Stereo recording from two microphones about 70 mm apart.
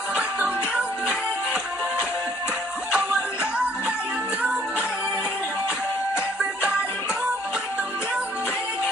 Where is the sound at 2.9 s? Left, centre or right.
Centre.